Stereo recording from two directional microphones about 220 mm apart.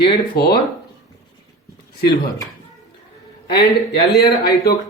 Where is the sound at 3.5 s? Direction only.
45° left (ahead or behind).